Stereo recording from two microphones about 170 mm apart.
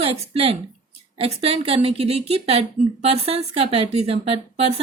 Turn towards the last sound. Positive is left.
turn(degrees=-35)  # may be behind; listen again after turning